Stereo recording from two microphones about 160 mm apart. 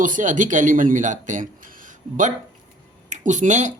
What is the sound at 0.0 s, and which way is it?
Speech, 55° right (ahead or behind).